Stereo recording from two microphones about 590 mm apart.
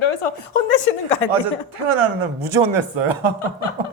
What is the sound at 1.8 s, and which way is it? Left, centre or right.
Speech, right.